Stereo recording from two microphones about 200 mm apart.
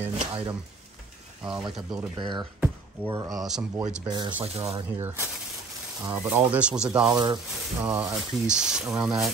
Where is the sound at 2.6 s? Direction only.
10° right (ahead or behind).